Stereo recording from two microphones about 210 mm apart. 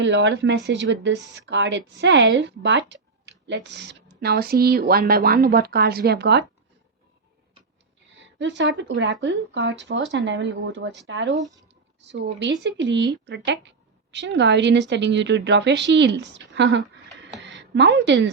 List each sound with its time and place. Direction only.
0.0 s a woman's voice: 60° right (ahead or behind)
8.2 s a woman's voice: 60° right (ahead or behind)